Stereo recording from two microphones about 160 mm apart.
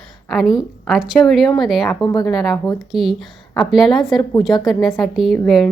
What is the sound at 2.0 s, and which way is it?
Speech, 25° left (ahead or behind).